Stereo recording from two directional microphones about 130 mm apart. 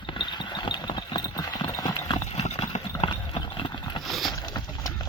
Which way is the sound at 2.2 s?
60° left (ahead or behind).